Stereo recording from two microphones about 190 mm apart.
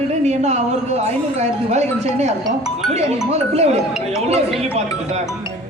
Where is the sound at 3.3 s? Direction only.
35° right (ahead or behind).